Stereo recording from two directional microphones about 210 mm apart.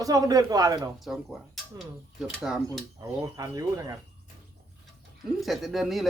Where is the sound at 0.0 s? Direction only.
15° right (ahead or behind).